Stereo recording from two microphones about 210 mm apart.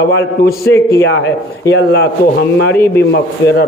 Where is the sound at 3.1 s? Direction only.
55° left (ahead or behind).